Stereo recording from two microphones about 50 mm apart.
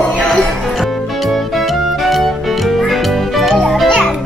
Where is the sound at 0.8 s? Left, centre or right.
Centre.